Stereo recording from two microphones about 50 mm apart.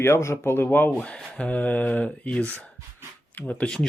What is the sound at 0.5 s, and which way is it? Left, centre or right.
Speech, left.